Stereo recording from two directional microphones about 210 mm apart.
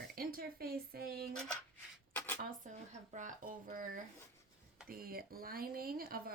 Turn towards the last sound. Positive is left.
turn(degrees=-45)  # may be behind; listen again after turning